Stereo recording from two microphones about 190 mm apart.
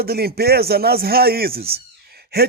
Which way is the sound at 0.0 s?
55° right (ahead or behind).